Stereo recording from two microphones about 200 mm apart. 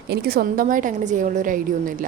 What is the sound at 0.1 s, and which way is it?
A woman's voice, 50° right (ahead or behind).